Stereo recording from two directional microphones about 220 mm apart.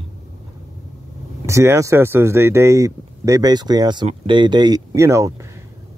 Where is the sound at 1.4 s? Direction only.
15° right (ahead or behind).